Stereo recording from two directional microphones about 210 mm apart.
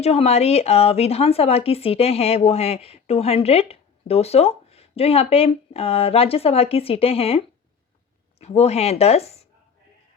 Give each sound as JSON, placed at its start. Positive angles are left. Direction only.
{"t": 0.0, "sound": "speech", "side_deg": 30}